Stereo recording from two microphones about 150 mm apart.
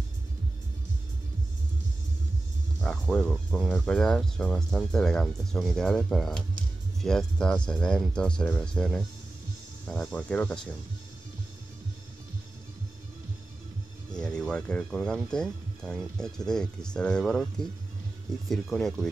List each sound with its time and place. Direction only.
2.8 s speech: 10° left (ahead or behind)
14.1 s speech: 5° left (ahead or behind)